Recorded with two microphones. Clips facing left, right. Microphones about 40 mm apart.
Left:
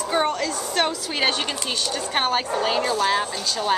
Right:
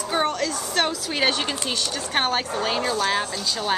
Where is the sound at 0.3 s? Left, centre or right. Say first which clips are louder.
Left 1 dB; centre.